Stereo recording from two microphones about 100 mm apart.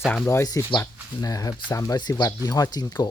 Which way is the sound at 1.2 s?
35° left (ahead or behind).